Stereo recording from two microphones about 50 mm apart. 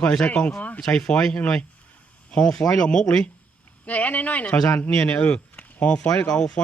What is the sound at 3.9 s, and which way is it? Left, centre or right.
Speech, left.